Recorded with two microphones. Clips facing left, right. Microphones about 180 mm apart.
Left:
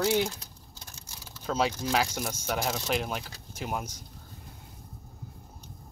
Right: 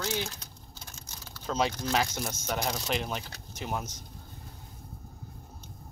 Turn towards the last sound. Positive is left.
turn(degrees=10)  # may be behind; listen again after turning